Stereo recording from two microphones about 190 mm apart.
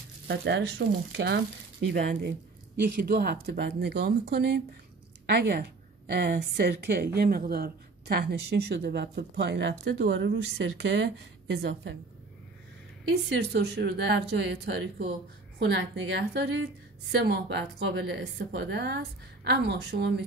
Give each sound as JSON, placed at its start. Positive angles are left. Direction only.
{"t": 0.3, "sound": "a woman's voice", "side_deg": -65}
{"t": 13.1, "sound": "a woman's voice", "side_deg": -60}